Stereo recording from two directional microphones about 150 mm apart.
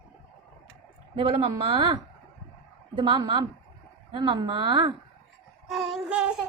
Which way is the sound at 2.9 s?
30° right (ahead or behind).